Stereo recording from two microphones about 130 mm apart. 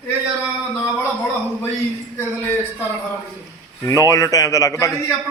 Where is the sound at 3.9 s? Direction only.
25° left (ahead or behind).